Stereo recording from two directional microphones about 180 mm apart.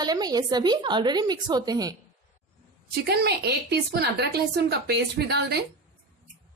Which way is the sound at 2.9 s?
65° right (ahead or behind).